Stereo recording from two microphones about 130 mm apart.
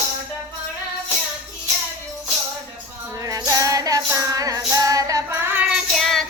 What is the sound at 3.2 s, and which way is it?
Music, 25° right (ahead or behind).